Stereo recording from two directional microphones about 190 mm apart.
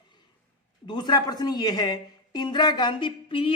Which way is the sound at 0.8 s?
25° left (ahead or behind).